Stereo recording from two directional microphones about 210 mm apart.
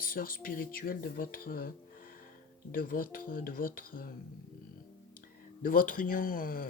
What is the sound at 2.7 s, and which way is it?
Speech, 45° left (ahead or behind).